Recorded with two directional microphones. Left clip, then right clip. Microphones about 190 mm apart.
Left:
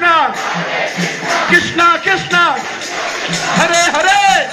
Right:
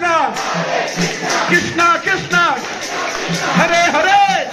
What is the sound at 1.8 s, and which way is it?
Music, 5° left (ahead or behind).